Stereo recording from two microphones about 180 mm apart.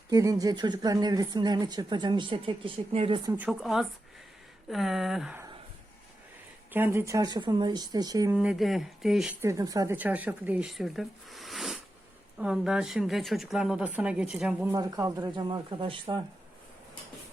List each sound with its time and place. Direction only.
0.1 s speech: 20° right (ahead or behind)
3.3 s a woman's voice: 5° right (ahead or behind)
6.7 s speech: 10° right (ahead or behind)
8.4 s a woman's voice: 5° right (ahead or behind)
9.4 s a woman's voice: 20° right (ahead or behind)
14.7 s speech: 20° right (ahead or behind)